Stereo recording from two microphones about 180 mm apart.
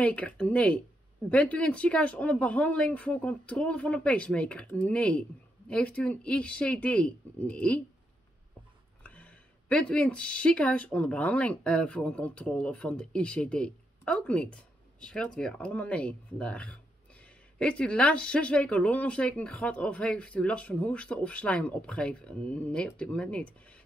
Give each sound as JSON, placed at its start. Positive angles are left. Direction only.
{"t": 0.0, "sound": "speech", "side_deg": 10}
{"t": 9.0, "sound": "speech", "side_deg": 5}